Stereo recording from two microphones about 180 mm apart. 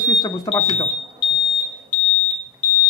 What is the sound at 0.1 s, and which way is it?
Speech, 20° left (ahead or behind).